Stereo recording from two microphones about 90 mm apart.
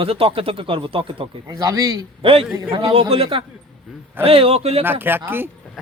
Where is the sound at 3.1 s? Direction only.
85° right.